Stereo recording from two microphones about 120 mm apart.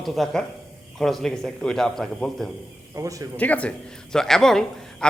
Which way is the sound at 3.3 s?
10° left (ahead or behind).